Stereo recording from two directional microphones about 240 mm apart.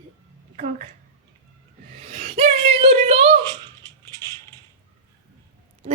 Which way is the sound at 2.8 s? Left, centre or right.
Right.